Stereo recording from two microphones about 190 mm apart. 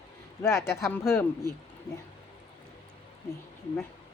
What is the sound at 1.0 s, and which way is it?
Speech, 15° left (ahead or behind).